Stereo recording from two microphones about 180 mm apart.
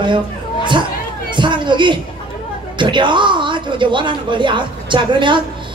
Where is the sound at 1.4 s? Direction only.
25° right (ahead or behind).